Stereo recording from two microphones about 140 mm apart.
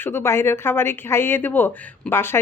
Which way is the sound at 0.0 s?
15° left (ahead or behind).